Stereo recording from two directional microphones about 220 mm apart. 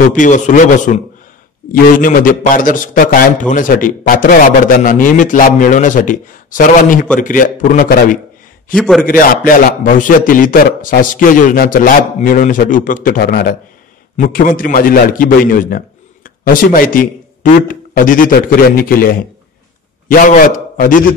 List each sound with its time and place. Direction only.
0.1 s a man's voice: 35° left (ahead or behind)
8.7 s a man's voice: centre (ahead or behind)
9.2 s a man's voice: 40° left (ahead or behind)